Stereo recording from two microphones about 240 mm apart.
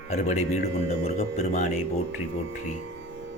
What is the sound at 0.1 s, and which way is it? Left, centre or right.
Speech, left.